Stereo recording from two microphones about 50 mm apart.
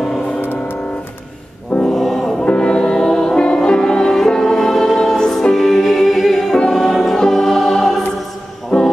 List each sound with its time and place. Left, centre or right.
0.4 s music: left
1.9 s music: centre
2.4 s music: left